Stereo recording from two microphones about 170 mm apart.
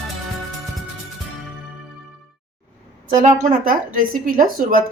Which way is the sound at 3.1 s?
50° right (ahead or behind).